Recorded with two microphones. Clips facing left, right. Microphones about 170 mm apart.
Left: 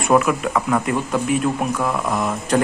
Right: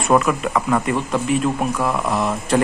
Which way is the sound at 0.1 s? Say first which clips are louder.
Even; centre (ahead or behind).